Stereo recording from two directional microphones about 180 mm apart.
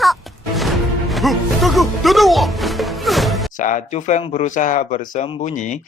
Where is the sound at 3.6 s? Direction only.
45° left (ahead or behind).